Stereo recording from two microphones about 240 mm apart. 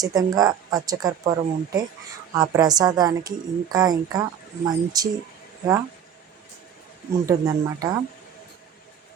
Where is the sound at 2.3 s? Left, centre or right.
Centre.